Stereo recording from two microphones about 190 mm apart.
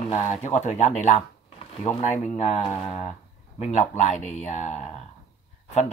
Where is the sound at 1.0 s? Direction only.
35° left (ahead or behind).